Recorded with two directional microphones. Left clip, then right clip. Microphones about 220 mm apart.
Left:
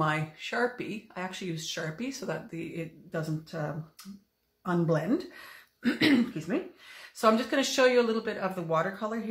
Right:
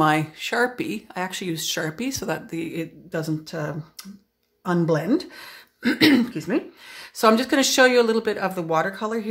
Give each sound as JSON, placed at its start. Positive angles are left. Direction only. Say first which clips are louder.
{"t": 0.0, "sound": "speech", "louder": "right 10 dB", "side_deg": -50}